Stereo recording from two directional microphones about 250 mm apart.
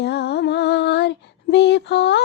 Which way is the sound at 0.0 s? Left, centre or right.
Left.